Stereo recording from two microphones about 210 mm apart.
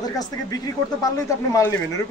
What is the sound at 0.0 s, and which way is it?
Speech, 20° left (ahead or behind).